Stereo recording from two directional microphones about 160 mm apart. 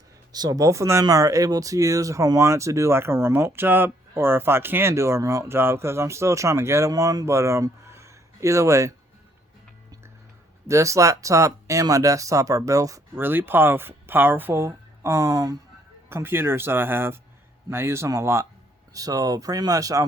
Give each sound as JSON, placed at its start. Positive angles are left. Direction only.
{"t": 0.3, "sound": "speech", "side_deg": -25}
{"t": 10.7, "sound": "speech", "side_deg": -20}